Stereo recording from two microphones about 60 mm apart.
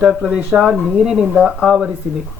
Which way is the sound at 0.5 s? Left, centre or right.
Centre.